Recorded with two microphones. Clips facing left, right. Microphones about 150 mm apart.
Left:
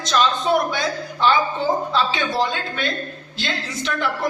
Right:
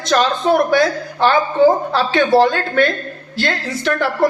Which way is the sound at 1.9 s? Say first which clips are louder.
Right 8 dB; 60° right (ahead or behind).